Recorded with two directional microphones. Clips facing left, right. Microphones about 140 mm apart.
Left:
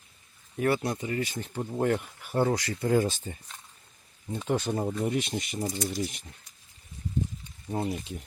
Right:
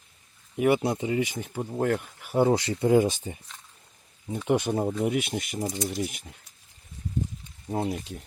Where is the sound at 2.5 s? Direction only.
25° right (ahead or behind).